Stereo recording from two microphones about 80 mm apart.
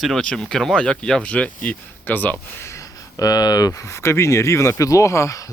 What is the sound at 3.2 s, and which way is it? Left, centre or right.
Speech, left.